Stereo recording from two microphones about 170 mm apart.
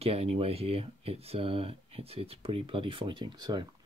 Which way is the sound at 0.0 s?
35° right (ahead or behind).